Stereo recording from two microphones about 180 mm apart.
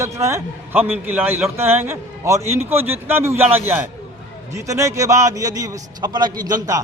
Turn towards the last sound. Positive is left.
turn(degrees=-20)  # may be behind; listen again after turning